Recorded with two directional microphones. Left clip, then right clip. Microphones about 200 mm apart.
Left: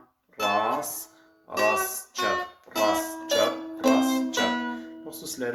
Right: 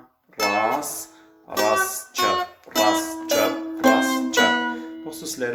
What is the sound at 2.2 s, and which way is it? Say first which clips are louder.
Music: right 5 dB; 15° right (ahead or behind).